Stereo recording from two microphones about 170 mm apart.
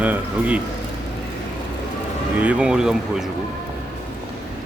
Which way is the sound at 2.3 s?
10° right (ahead or behind).